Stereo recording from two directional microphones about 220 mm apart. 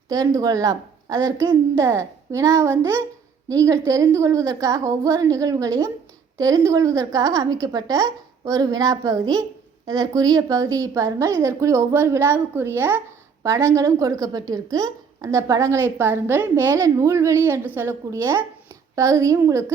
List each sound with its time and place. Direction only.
0.1 s a woman's voice: 15° right (ahead or behind)